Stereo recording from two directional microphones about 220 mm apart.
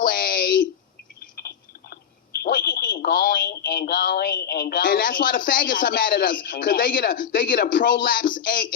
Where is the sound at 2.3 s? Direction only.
45° left (ahead or behind).